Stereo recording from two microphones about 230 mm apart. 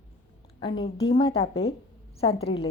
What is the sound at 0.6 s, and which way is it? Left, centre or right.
Speech, left.